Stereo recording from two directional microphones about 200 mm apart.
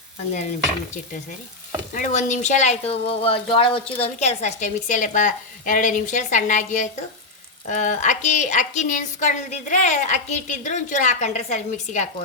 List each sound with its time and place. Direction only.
1.9 s a woman's voice: 40° left (ahead or behind)